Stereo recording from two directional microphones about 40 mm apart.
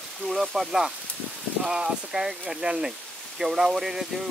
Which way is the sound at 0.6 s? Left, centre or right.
Centre.